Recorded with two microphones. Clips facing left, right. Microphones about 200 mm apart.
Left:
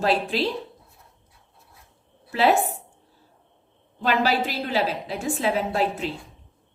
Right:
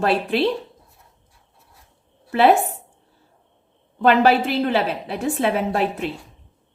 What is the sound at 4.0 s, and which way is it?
Speech, 60° right (ahead or behind).